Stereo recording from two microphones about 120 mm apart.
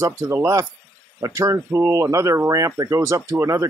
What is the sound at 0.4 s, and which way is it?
Speech, 25° right (ahead or behind).